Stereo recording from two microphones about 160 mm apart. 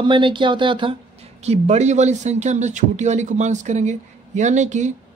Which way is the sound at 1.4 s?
45° right (ahead or behind).